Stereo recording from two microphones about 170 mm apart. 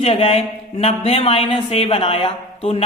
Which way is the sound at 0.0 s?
35° left (ahead or behind).